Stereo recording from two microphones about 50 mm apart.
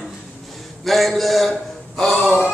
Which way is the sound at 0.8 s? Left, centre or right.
Centre.